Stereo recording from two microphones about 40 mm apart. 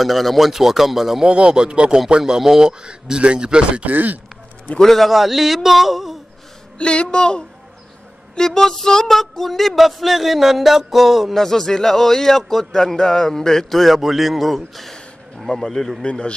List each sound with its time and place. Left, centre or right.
0.0 s music: centre
1.2 s a man's voice: right
3.8 s speech: right
4.8 s music: centre
6.8 s speech: left
8.4 s music: centre
11.3 s speech: centre
16.0 s speech: left